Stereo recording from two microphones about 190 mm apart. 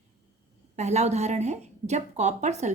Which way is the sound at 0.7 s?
35° right (ahead or behind).